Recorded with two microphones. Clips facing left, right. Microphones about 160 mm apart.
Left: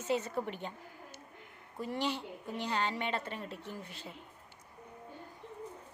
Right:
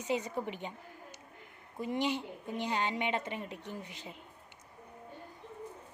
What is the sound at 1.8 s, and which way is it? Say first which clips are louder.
A woman's voice: right 2 dB; 15° right (ahead or behind).